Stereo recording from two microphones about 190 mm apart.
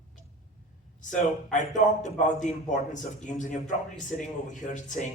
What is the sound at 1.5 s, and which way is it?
A man's voice, 40° left (ahead or behind).